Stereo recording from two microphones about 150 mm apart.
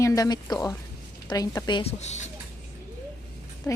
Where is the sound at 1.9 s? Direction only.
50° left (ahead or behind).